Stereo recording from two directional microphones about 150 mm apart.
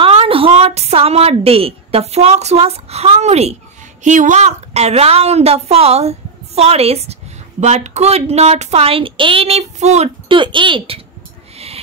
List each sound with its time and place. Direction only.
0.0 s a woman's voice: 40° right (ahead or behind)
11.5 s music: 40° right (ahead or behind)